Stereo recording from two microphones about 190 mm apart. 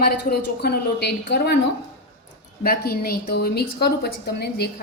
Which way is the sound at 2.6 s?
55° left (ahead or behind).